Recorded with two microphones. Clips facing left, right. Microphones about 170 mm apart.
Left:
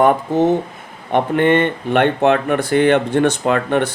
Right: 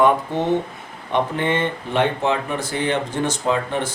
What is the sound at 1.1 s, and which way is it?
Speech, 60° left (ahead or behind).